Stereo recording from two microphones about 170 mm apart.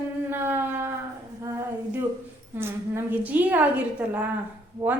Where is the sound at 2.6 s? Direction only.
15° right (ahead or behind).